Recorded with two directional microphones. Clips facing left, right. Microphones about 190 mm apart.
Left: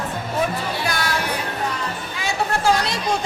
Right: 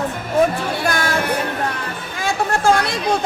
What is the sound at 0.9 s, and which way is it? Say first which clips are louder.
Music: right 6 dB; 50° right (ahead or behind).